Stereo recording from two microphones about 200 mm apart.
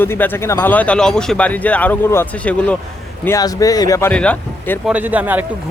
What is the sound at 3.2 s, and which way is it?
Speech, 15° left (ahead or behind).